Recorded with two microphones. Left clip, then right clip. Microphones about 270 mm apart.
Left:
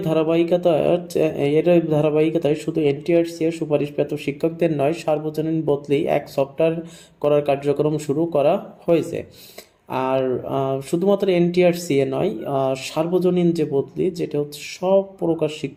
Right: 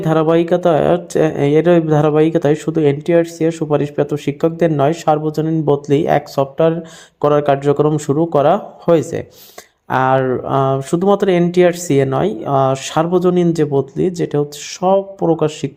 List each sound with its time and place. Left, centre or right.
0.0 s speech: right